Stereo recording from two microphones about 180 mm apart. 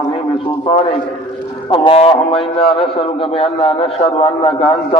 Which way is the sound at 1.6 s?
30° left (ahead or behind).